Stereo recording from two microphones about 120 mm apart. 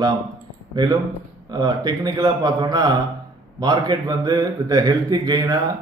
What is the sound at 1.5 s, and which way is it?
A man's voice, 35° right (ahead or behind).